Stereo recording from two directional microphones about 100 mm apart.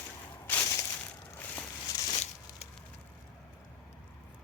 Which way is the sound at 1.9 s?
35° left (ahead or behind).